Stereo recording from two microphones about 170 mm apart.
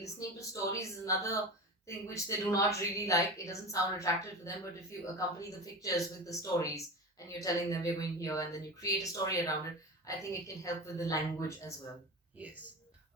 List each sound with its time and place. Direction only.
0.0 s a woman's voice: 20° left (ahead or behind)